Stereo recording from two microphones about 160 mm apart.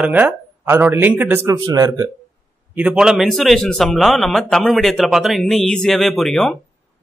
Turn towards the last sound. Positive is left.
turn(degrees=0)  # may be behind; listen again after turning